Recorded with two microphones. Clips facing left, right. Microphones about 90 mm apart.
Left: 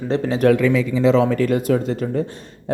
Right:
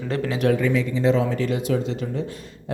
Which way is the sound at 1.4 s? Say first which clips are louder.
Left 5 dB; 50° left (ahead or behind).